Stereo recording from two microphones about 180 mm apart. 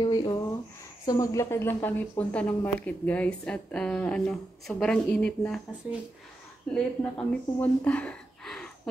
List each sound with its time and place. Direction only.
0.0 s speech: 25° left (ahead or behind); by 5.6 s 5° left (ahead or behind)
6.7 s speech: 5° left (ahead or behind)